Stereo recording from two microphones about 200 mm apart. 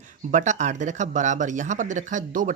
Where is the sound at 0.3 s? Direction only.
35° right (ahead or behind).